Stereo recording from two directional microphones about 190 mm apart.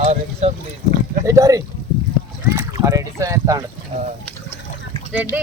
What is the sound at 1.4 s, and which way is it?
Speech, 20° right (ahead or behind).